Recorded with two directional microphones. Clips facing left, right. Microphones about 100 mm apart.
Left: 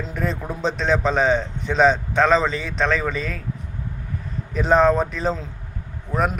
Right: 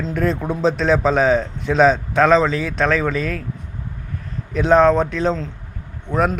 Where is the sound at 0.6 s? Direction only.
5° right (ahead or behind).